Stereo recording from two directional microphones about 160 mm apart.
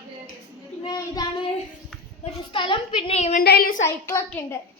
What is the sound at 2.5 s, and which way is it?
Speech, 30° left (ahead or behind).